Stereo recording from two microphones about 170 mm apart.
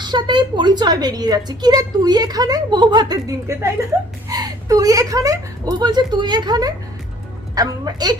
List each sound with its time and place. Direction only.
0.0 s a woman's voice: 25° right (ahead or behind)